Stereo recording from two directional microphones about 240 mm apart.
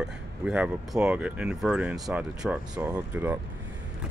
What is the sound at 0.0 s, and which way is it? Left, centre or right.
Speech, centre.